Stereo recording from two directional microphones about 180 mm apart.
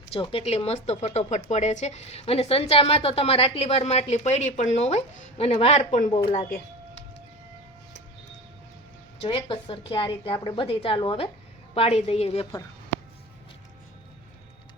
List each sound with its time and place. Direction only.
0.1 s a woman's voice: 30° left (ahead or behind)
9.2 s a woman's voice: 25° left (ahead or behind)